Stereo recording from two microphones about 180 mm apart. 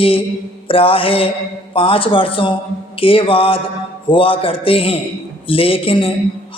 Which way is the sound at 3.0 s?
30° left (ahead or behind).